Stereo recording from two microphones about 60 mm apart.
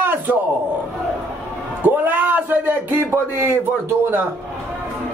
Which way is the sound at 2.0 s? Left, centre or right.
Right.